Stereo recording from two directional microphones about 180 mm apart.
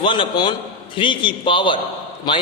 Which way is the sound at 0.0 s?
25° left (ahead or behind).